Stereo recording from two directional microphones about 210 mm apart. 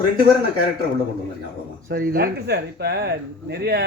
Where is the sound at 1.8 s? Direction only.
45° right (ahead or behind).